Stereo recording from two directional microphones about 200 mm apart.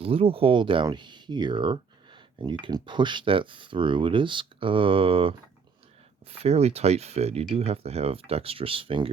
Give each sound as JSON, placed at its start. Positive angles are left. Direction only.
{"t": 0.0, "sound": "speech", "side_deg": -30}